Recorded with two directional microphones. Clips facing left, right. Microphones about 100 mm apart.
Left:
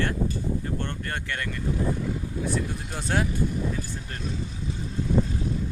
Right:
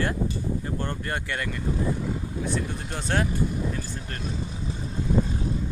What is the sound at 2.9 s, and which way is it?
Speech, 5° left (ahead or behind).